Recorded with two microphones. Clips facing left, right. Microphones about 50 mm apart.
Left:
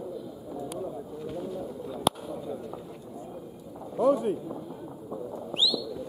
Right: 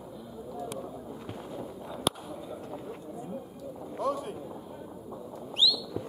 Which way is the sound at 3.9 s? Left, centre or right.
Centre.